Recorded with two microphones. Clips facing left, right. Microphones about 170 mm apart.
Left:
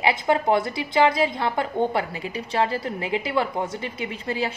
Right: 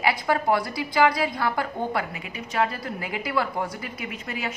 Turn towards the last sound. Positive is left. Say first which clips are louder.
# left 5 dB
turn(degrees=30)  # may be behind; listen again after turning